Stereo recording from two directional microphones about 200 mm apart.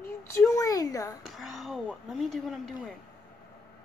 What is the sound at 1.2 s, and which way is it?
Speech, centre (ahead or behind).